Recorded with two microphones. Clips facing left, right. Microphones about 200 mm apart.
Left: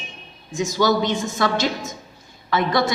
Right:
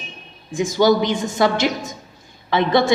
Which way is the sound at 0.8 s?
20° right (ahead or behind).